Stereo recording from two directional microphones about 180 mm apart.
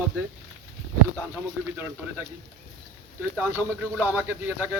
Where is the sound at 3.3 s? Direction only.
10° right (ahead or behind).